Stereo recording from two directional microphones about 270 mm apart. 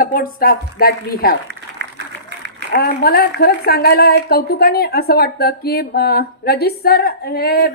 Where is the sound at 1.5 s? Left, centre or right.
Right.